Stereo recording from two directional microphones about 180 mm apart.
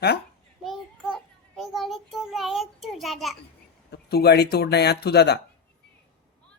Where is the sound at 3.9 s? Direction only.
65° left (ahead or behind).